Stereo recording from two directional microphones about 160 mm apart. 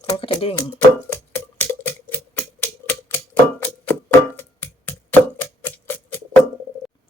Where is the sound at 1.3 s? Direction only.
10° left (ahead or behind).